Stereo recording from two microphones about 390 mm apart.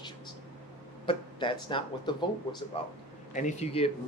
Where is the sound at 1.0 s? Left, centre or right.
Centre.